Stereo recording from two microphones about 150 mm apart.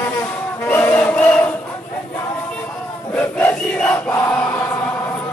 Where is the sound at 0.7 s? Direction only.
15° left (ahead or behind).